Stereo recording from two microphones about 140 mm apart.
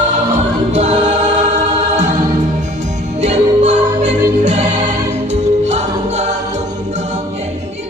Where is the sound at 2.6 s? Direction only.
60° right (ahead or behind).